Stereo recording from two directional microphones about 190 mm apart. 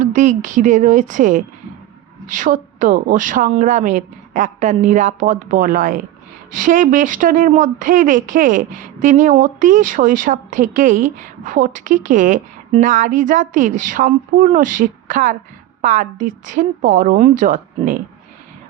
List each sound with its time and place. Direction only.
0.0 s speech: 40° right (ahead or behind)